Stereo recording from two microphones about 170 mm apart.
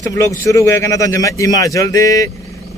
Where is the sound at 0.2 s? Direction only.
15° left (ahead or behind).